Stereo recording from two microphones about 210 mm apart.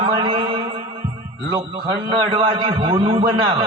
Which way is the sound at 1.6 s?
25° right (ahead or behind).